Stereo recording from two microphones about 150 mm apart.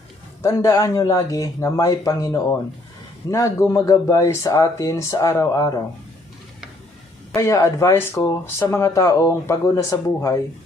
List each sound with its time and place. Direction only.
0.4 s speech: 20° left (ahead or behind)
7.3 s speech: 20° left (ahead or behind)